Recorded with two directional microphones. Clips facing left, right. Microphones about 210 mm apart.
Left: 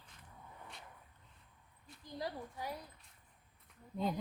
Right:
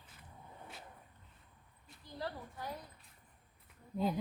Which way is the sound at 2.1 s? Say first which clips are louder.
Left 1 dB; 15° left (ahead or behind).